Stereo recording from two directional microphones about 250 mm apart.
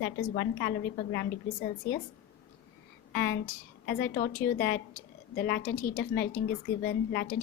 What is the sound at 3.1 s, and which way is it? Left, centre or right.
A woman's voice, left.